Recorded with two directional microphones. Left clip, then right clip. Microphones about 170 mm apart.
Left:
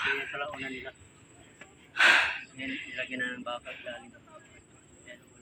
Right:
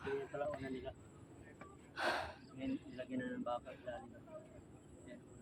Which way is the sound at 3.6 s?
Centre (ahead or behind).